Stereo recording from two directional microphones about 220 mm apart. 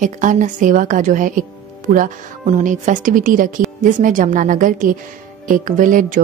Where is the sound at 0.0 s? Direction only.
35° right (ahead or behind).